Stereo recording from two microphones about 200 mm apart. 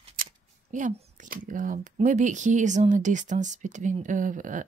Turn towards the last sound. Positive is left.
turn(degrees=-40)  # may be behind; listen again after turning